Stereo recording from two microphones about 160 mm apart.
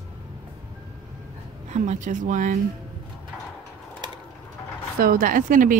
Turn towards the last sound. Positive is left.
turn(degrees=-55)  # may be behind; listen again after turning